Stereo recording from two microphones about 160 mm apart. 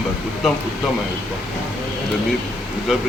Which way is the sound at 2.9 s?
Centre (ahead or behind).